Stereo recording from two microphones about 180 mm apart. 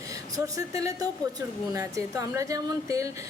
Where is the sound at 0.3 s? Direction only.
20° right (ahead or behind).